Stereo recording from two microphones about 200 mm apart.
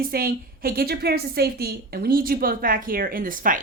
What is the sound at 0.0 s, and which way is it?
A woman's voice, 50° right (ahead or behind).